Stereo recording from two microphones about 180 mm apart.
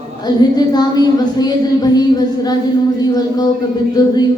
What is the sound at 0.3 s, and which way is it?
A woman's voice, 20° left (ahead or behind).